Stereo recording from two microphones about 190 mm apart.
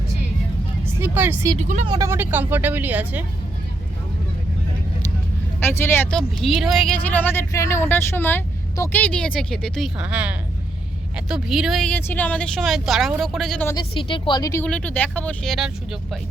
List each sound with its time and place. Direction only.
0.9 s speech: 10° right (ahead or behind)
1.5 s speech: 40° right (ahead or behind)
1.9 s speech: 15° right (ahead or behind)
5.5 s speech: 10° left (ahead or behind)
13.7 s a woman's voice: 25° left (ahead or behind)
14.6 s speech: 5° left (ahead or behind)